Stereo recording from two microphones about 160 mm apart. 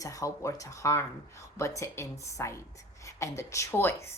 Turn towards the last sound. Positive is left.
turn(degrees=15)  # may be behind; listen again after turning